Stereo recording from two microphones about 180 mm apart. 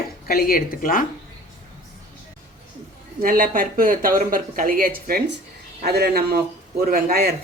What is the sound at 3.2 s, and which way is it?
Speech, 50° right (ahead or behind).